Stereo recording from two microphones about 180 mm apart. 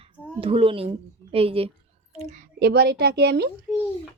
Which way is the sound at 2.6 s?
60° right (ahead or behind).